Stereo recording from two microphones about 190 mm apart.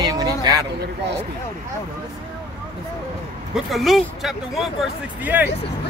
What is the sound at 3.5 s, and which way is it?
Speech, centre (ahead or behind).